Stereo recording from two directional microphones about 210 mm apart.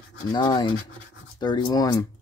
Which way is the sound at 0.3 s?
20° left (ahead or behind).